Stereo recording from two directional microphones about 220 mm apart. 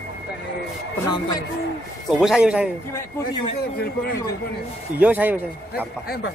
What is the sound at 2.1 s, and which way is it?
Speech, centre (ahead or behind).